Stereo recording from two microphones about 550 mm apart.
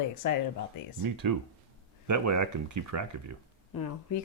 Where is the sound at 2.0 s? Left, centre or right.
Right.